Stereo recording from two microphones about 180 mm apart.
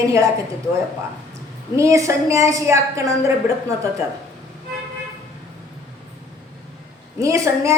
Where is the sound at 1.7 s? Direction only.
15° right (ahead or behind).